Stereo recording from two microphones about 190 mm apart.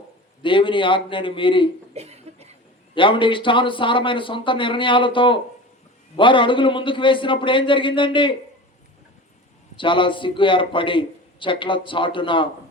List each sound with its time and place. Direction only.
0.4 s a man's voice: 25° left (ahead or behind)
1.9 s a sound: 35° right (ahead or behind)
2.9 s a man's voice: 25° left (ahead or behind)
9.7 s a man's voice: 25° left (ahead or behind)